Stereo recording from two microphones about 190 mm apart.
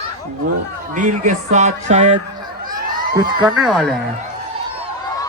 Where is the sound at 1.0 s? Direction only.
40° right (ahead or behind).